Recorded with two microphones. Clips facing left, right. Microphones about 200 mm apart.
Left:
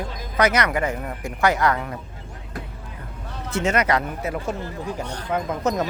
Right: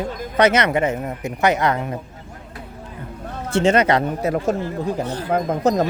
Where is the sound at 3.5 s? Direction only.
30° right (ahead or behind).